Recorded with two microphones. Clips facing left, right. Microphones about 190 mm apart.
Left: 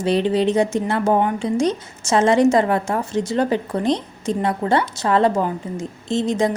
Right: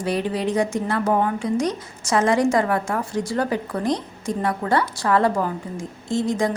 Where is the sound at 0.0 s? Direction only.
25° left (ahead or behind).